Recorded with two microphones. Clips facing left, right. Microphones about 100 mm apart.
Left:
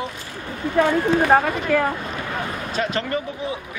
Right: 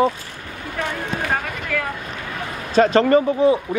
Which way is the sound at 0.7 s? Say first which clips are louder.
Left 8 dB; 35° left (ahead or behind).